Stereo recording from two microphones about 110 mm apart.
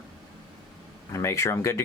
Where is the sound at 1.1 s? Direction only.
25° left (ahead or behind).